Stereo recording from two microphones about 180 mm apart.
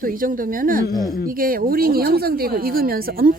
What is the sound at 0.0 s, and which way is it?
A woman's voice, 50° right (ahead or behind).